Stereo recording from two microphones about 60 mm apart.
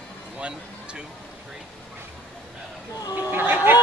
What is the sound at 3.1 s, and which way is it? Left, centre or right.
Chatter, right.